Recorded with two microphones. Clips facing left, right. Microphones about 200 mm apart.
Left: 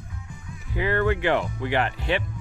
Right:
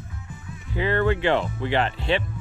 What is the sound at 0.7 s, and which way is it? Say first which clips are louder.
Speech: right 1 dB; 20° right (ahead or behind).